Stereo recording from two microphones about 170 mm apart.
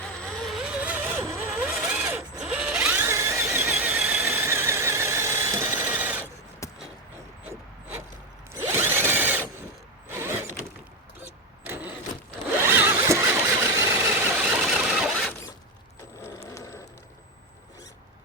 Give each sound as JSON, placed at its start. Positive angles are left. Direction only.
{"t": 0.0, "sound": "vehicle", "side_deg": 5}
{"t": 2.4, "sound": "squeal", "side_deg": -5}
{"t": 6.6, "sound": "a sound", "side_deg": 20}
{"t": 8.8, "sound": "ratchet", "side_deg": -15}
{"t": 10.1, "sound": "mechanisms", "side_deg": -15}
{"t": 11.2, "sound": "vehicle", "side_deg": -10}
{"t": 14.5, "sound": "mechanisms", "side_deg": -5}
{"t": 16.5, "sound": "a sound", "side_deg": 20}